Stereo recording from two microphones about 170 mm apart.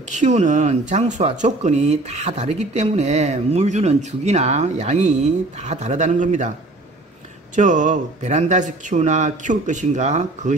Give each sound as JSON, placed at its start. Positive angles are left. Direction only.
{"t": 0.1, "sound": "speech", "side_deg": -45}
{"t": 7.5, "sound": "speech", "side_deg": -45}